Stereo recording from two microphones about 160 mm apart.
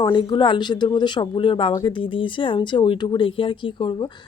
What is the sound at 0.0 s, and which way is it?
Speech, 30° left (ahead or behind).